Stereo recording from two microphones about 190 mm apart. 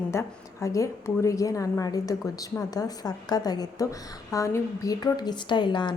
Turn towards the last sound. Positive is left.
turn(degrees=25)  # may be behind; listen again after turning